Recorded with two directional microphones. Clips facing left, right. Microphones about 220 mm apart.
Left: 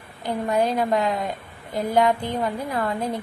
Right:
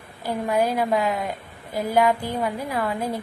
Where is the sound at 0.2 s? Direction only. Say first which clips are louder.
Even; 10° right (ahead or behind).